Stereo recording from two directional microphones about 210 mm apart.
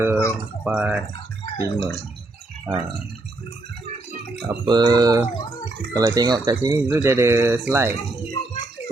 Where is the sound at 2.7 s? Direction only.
10° right (ahead or behind).